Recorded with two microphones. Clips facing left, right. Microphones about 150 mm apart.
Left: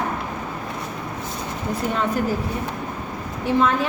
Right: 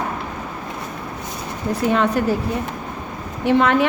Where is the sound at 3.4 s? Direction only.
70° right (ahead or behind).